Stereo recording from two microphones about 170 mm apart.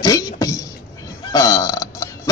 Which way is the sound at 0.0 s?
20° left (ahead or behind).